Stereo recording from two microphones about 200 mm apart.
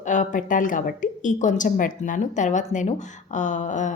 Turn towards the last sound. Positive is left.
turn(degrees=40)  # may be behind; listen again after turning